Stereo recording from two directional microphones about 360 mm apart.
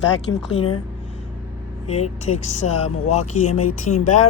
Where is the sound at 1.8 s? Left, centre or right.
Centre.